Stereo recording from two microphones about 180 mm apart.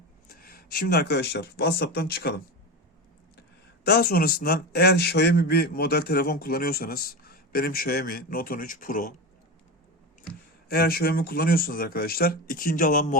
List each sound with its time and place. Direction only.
0.3 s speech: 55° left (ahead or behind)
3.8 s a man's voice: 60° left (ahead or behind)
10.7 s a man's voice: 55° left (ahead or behind)